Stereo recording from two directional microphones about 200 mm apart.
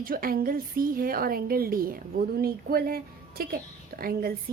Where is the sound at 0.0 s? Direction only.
45° right (ahead or behind).